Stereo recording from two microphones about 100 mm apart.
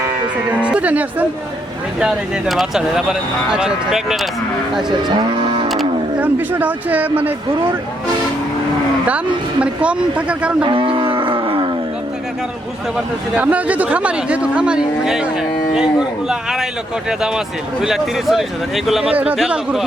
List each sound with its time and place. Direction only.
0.5 s speech: 10° right (ahead or behind)
4.9 s speech: 45° right (ahead or behind)
5.6 s a sound: centre (ahead or behind)
6.1 s speech: 15° right (ahead or behind)
9.0 s speech: 15° right (ahead or behind)
10.7 s wild animals: 60° right (ahead or behind)
13.3 s speech: 15° right (ahead or behind)
19.1 s speech: 15° right (ahead or behind)